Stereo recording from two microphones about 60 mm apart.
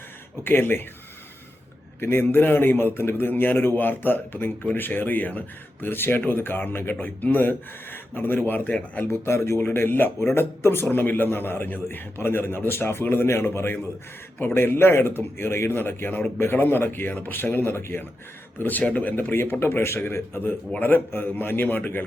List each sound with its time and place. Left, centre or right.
0.4 s speech: left
2.0 s speech: left
9.0 s speech: left
20.4 s speech: left